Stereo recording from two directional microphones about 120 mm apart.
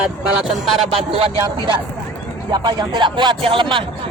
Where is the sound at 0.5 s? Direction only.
Centre (ahead or behind).